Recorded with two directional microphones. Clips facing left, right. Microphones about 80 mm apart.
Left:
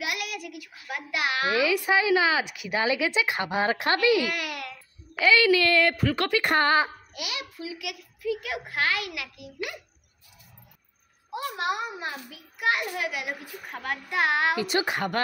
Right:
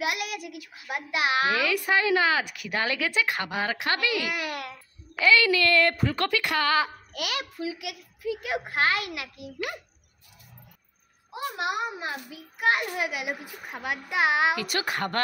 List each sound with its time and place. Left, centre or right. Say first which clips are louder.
0.0 s a child's voice: right 2 dB; right
1.6 s speech: left 1 dB; centre
4.4 s babbling: right 1 dB; right
5.1 s speech: left 1 dB; centre
6.4 s a woman's voice: left 4 dB; left
7.2 s a child's voice: right 4 dB; right
12.5 s a child's voice: right 2 dB; right
14.5 s speech: left 2 dB; left